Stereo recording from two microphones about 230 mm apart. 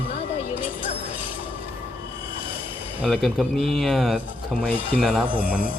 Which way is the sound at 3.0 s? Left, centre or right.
Centre.